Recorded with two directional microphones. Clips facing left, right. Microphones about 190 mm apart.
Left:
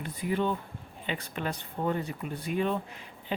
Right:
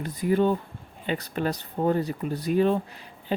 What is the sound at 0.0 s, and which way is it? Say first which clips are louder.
Speech: right 7 dB; 40° right (ahead or behind).